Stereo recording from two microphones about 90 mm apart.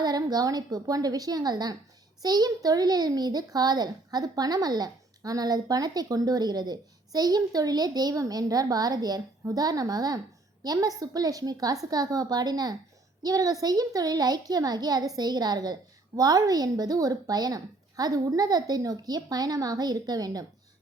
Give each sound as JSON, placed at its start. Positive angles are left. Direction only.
{"t": 0.0, "sound": "a child's voice", "side_deg": -45}